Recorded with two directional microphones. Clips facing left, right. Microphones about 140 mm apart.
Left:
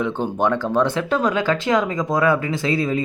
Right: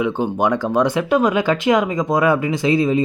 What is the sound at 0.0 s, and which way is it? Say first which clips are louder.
Speech: right 2 dB; 10° right (ahead or behind).